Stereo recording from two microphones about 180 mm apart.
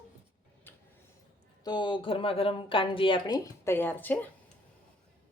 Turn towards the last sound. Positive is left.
turn(degrees=10)  # may be behind; listen again after turning